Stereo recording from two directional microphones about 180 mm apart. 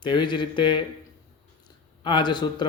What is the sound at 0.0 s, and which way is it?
Speech, 25° left (ahead or behind).